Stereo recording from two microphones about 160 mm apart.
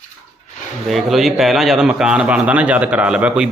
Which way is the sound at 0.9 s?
Centre (ahead or behind).